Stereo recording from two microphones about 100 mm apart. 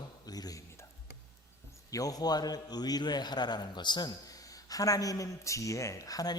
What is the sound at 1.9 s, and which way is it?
A man's voice, 40° left (ahead or behind).